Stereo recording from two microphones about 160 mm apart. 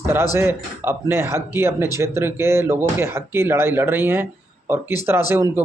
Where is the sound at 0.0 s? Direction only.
15° right (ahead or behind).